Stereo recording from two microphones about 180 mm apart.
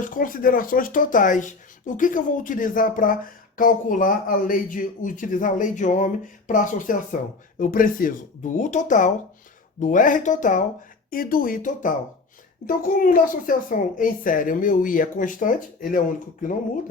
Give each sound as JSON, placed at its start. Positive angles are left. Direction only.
{"t": 0.0, "sound": "speech", "side_deg": 50}